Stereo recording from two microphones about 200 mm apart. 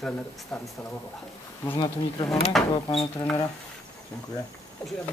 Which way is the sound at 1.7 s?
25° left (ahead or behind).